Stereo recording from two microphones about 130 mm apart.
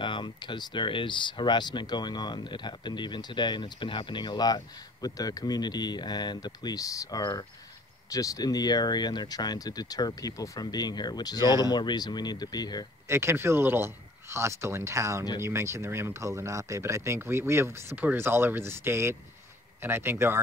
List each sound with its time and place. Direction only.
0.0 s speech: 35° left (ahead or behind)
13.1 s speech: 20° right (ahead or behind)